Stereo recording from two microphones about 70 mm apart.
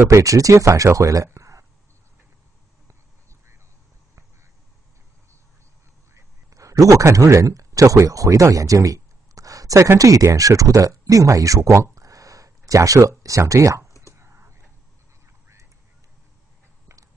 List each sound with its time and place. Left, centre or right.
0.1 s speech: right
6.1 s a sound: right
9.9 s speech: right
14.1 s whispering: right